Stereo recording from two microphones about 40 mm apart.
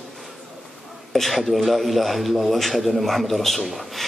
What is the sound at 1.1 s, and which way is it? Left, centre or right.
Speech, centre.